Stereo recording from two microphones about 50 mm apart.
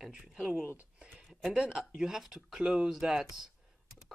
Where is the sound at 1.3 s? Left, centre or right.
Centre.